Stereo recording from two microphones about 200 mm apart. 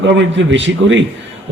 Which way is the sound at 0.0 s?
65° right (ahead or behind).